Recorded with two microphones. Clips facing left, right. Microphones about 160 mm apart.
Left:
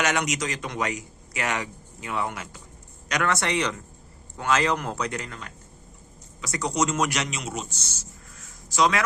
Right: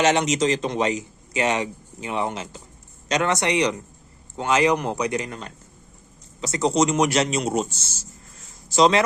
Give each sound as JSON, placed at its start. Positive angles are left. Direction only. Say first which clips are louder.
{"t": 0.0, "sound": "a man's voice", "louder": "right 7 dB", "side_deg": -25}
{"t": 7.1, "sound": "speech", "louder": "right 9 dB", "side_deg": -30}